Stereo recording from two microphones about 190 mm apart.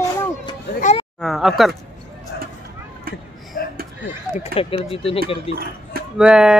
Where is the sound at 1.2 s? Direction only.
Centre (ahead or behind).